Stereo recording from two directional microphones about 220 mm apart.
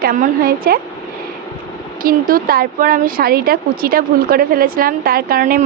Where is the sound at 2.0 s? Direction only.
40° right (ahead or behind).